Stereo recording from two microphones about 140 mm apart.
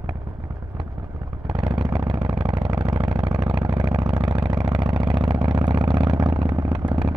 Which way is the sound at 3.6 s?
30° right (ahead or behind).